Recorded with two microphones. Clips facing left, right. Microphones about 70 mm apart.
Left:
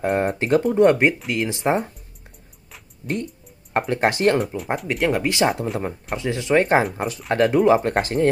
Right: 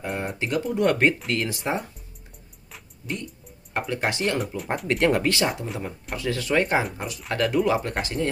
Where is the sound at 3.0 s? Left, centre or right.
Left.